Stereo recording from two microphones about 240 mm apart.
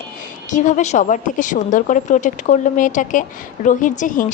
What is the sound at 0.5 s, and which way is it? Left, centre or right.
A woman's voice, left.